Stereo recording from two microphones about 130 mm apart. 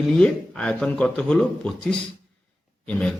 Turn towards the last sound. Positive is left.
turn(degrees=10)  # may be behind; listen again after turning